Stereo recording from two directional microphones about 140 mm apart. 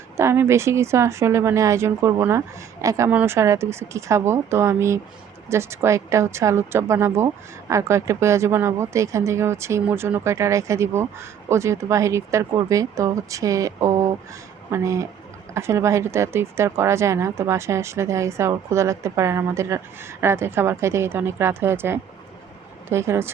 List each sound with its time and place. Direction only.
0.2 s speech: 20° right (ahead or behind)